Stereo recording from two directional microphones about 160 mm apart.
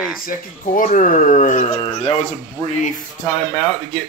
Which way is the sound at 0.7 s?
55° left (ahead or behind).